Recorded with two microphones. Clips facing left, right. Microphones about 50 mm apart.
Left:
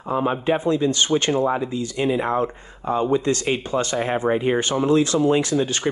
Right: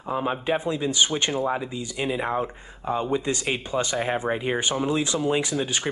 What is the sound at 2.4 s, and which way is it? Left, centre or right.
Speech, centre.